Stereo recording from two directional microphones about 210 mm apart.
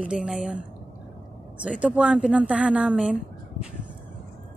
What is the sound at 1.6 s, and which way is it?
Speech, 5° right (ahead or behind).